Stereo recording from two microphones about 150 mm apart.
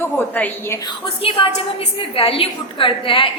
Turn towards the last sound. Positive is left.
turn(degrees=35)  # may be behind; listen again after turning